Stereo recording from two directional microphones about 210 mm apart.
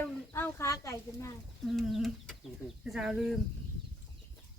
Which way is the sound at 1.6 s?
Centre (ahead or behind).